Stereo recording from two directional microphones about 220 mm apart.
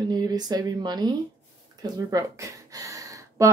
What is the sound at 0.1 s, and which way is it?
Speech, 15° right (ahead or behind).